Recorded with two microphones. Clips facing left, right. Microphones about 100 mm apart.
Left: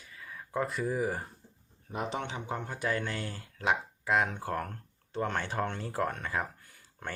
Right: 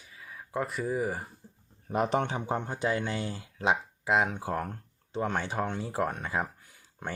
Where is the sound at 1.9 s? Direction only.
55° right (ahead or behind).